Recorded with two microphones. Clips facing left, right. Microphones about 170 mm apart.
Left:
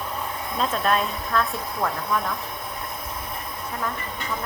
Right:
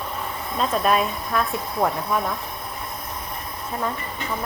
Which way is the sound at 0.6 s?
10° right (ahead or behind).